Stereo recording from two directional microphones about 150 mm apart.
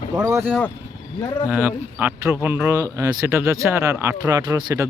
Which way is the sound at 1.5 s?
10° right (ahead or behind).